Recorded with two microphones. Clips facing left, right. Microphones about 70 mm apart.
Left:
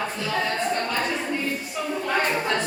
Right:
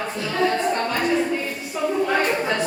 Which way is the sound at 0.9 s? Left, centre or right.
Centre.